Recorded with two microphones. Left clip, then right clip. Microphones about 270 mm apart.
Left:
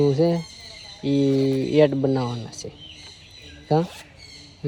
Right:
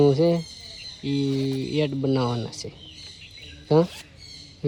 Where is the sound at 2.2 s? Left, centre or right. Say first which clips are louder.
Right 2 dB; centre.